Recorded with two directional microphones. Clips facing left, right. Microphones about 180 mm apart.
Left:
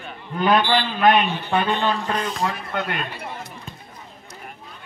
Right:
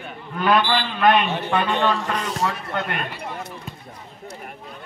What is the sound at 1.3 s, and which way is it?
A man's voice, 80° right.